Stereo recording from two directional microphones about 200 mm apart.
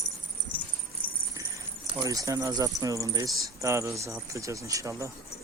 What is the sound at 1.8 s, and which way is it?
Speech, 15° right (ahead or behind).